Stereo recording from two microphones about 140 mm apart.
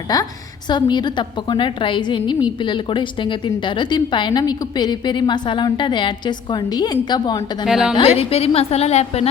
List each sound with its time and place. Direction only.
0.1 s a woman's voice: 25° left (ahead or behind)
7.6 s a woman's voice: 5° right (ahead or behind)
7.9 s a woman's voice: 45° left (ahead or behind)